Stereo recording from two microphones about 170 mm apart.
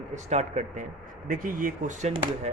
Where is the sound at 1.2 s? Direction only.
55° right (ahead or behind).